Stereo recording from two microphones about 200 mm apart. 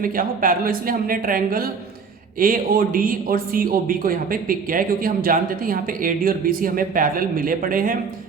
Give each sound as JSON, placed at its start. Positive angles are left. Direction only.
{"t": 0.0, "sound": "speech", "side_deg": -45}